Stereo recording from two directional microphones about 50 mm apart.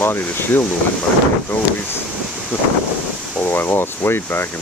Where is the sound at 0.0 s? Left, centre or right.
Left.